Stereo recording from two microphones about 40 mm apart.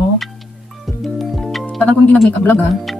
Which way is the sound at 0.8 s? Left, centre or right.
Centre.